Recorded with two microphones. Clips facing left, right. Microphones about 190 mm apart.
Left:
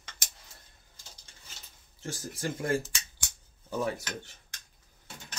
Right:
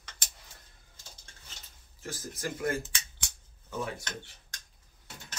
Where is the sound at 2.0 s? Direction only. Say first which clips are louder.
Left 2 dB; 30° left (ahead or behind).